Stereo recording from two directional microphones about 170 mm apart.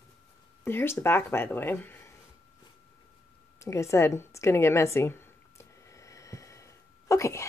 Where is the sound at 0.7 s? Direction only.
15° left (ahead or behind).